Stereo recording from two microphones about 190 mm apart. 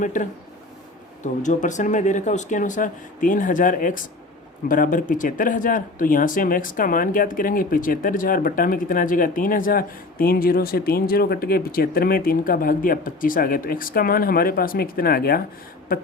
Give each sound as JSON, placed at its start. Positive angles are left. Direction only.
{"t": 0.0, "sound": "speech", "side_deg": 40}